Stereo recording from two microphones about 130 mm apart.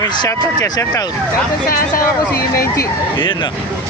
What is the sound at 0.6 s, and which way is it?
Speech, 30° left (ahead or behind).